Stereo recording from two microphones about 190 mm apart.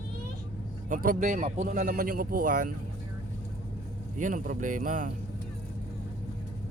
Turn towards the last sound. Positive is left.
turn(degrees=-45)  # may be behind; listen again after turning